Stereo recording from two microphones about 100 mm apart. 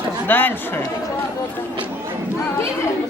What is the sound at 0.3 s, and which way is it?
Speech, 20° left (ahead or behind).